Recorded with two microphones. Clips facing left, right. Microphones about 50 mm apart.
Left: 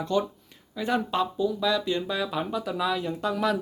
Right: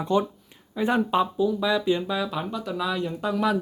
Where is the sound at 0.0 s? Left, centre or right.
Right.